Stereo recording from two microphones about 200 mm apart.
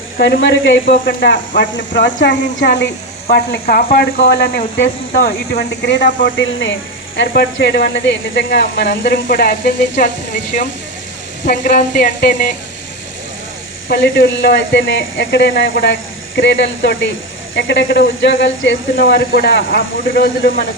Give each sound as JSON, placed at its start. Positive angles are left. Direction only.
{"t": 0.2, "sound": "speech", "side_deg": 60}
{"t": 0.9, "sound": "speech", "side_deg": 45}
{"t": 1.7, "sound": "speech", "side_deg": 65}
{"t": 9.2, "sound": "speech", "side_deg": 45}
{"t": 13.8, "sound": "speech", "side_deg": 60}
{"t": 19.0, "sound": "speech", "side_deg": 55}